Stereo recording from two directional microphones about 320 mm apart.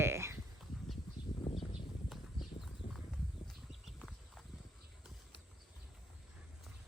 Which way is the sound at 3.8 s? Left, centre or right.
Centre.